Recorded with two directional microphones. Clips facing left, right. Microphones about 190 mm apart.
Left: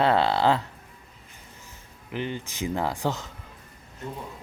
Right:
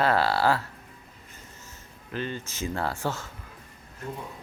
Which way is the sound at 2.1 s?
15° left (ahead or behind).